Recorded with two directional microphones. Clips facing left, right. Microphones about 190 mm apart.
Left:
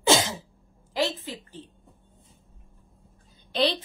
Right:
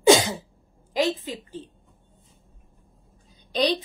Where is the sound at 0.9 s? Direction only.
15° right (ahead or behind).